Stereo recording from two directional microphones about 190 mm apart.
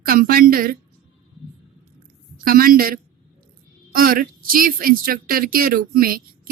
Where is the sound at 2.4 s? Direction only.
50° right (ahead or behind).